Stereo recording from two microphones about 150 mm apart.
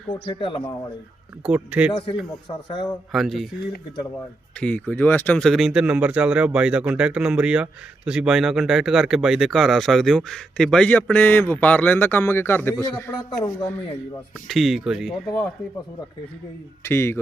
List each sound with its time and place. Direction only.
0.1 s speech: 35° left (ahead or behind)
1.5 s speech: 10° right (ahead or behind)
1.9 s speech: 35° left (ahead or behind)
3.1 s speech: centre (ahead or behind)
4.6 s a man's voice: 10° left (ahead or behind)
14.4 s speech: centre (ahead or behind)
16.8 s a man's voice: 15° left (ahead or behind)